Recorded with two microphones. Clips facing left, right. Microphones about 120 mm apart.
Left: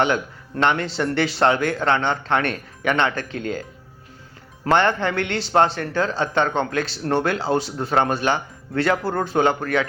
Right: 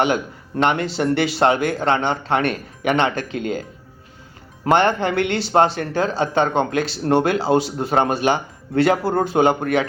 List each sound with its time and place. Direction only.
0.5 s speech: 10° right (ahead or behind)
4.6 s speech: 15° right (ahead or behind)